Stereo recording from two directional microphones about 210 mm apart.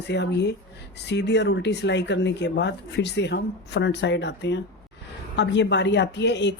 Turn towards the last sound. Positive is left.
turn(degrees=55)  # may be behind; listen again after turning